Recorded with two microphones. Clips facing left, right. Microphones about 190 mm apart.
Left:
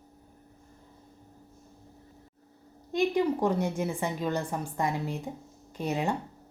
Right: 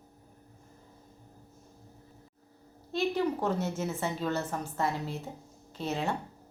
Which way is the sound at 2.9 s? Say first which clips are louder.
Left 3 dB; 15° left (ahead or behind).